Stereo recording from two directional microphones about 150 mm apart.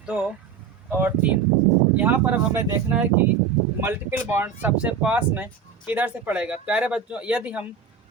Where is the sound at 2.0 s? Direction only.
10° right (ahead or behind).